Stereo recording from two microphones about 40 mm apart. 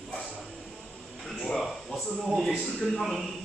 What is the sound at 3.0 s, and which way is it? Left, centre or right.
Speech, centre.